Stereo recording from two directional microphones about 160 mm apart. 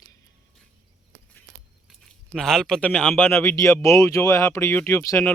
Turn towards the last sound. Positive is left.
turn(degrees=15)  # may be behind; listen again after turning